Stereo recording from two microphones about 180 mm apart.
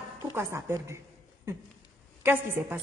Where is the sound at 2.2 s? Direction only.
10° right (ahead or behind).